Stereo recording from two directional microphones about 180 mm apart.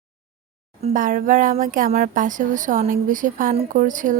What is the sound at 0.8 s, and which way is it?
A woman's voice, 50° right (ahead or behind).